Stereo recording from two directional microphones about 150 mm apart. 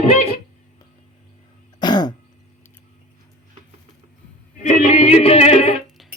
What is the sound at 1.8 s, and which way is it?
Throat clearing, 30° left (ahead or behind).